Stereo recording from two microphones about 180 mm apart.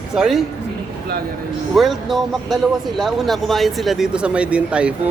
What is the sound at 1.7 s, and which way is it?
Speech, centre (ahead or behind).